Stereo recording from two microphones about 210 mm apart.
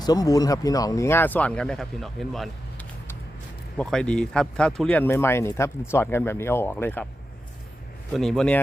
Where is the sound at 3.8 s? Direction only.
5° left (ahead or behind).